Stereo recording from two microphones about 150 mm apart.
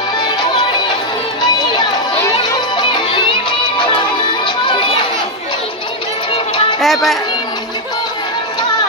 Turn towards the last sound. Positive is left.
turn(degrees=0)  # may be behind; listen again after turning